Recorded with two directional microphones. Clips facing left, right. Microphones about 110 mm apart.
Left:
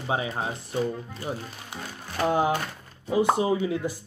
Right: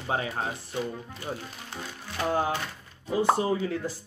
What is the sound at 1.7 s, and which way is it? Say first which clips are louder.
Music: left 1 dB; 15° left (ahead or behind).